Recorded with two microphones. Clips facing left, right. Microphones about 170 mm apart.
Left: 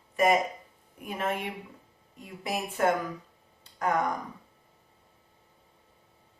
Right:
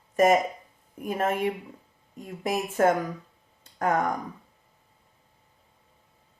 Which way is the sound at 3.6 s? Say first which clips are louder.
Right 3 dB; 45° right (ahead or behind).